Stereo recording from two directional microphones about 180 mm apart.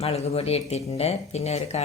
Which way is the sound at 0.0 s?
35° left (ahead or behind).